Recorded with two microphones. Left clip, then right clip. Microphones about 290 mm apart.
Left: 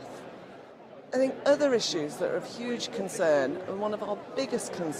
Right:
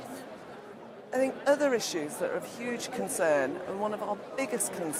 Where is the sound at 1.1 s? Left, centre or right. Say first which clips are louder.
Left 2 dB; right.